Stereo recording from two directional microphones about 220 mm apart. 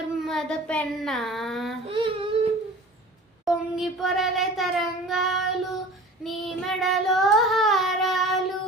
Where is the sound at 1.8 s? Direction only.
25° right (ahead or behind).